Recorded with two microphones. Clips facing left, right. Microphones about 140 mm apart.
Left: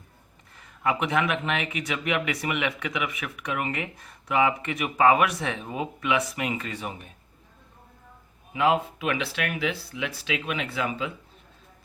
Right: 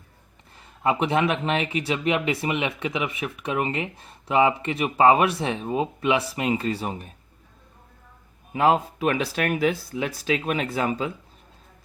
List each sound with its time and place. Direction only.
0.5 s speech: 30° right (ahead or behind)
8.5 s speech: 40° right (ahead or behind)